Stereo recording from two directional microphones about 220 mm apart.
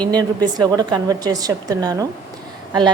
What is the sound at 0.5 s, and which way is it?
A woman's voice, 20° right (ahead or behind).